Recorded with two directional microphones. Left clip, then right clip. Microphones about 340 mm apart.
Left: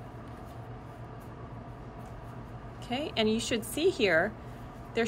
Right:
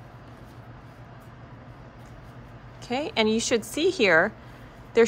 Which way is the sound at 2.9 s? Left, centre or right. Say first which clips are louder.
Right 5 dB; centre.